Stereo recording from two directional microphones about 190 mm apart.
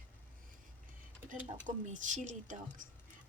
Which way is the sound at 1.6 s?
40° right (ahead or behind).